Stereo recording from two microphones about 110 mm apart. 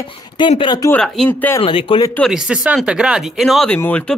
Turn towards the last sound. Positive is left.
turn(degrees=15)  # may be behind; listen again after turning